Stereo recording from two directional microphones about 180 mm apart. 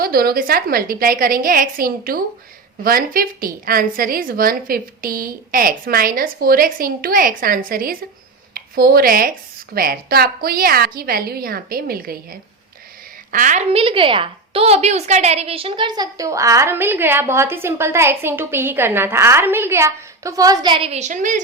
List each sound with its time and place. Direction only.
0.0 s a woman's voice: 55° right (ahead or behind)
13.3 s a woman's voice: 45° right (ahead or behind)